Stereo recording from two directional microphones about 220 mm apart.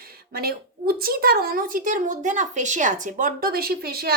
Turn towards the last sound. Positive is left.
turn(degrees=-45)  # may be behind; listen again after turning